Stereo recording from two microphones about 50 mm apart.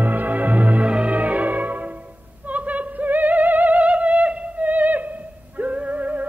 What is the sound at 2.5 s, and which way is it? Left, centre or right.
Music, right.